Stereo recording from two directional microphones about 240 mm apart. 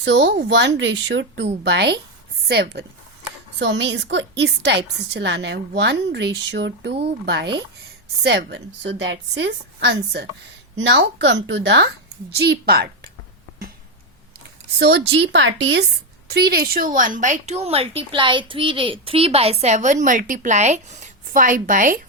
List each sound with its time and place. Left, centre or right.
0.0 s a woman's voice: right
14.8 s a woman's voice: right